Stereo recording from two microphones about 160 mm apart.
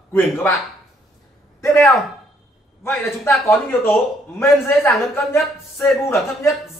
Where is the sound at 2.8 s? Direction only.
15° left (ahead or behind).